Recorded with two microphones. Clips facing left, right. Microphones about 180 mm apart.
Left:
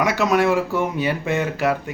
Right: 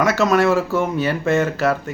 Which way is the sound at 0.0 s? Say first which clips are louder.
Right 2 dB; 15° left (ahead or behind).